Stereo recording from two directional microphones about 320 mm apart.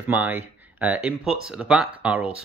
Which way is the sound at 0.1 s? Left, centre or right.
Centre.